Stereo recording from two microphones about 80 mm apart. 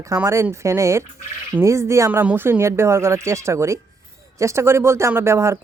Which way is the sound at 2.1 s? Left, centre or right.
Right.